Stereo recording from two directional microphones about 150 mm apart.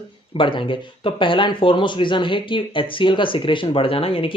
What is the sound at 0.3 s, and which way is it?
Speech, 35° left (ahead or behind).